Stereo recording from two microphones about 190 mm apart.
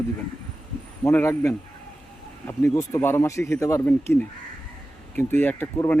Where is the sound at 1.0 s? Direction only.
10° left (ahead or behind).